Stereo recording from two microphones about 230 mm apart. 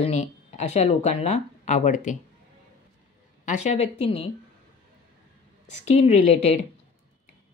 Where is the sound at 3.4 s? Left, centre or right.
Left.